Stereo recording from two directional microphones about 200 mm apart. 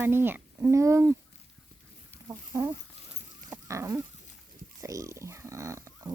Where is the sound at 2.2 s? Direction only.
15° right (ahead or behind).